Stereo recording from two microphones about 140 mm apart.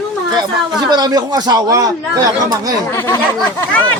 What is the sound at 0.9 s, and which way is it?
Speech, 25° right (ahead or behind).